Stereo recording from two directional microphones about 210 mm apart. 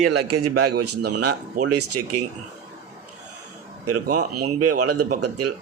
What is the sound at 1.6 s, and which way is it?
Speech, 90° right.